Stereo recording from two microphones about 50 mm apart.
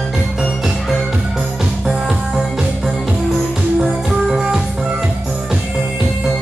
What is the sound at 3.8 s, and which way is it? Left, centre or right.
Music, centre.